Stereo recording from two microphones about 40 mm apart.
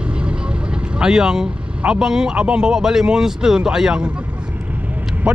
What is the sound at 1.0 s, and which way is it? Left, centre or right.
Speech, centre.